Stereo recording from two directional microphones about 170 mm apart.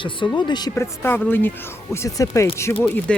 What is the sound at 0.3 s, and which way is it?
Speech, 25° left (ahead or behind).